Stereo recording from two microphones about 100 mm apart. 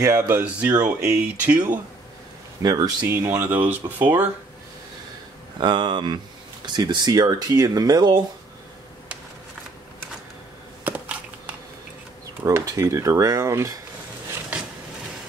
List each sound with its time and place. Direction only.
0.0 s speech: 30° right (ahead or behind)
0.4 s speech: 15° right (ahead or behind)
0.7 s speech: 30° right (ahead or behind)
2.6 s speech: 40° right (ahead or behind)
3.3 s speech: 20° right (ahead or behind)
5.6 s speech: 50° right (ahead or behind)
10.8 s a sound: 15° right (ahead or behind)
12.4 s speech: 35° right (ahead or behind)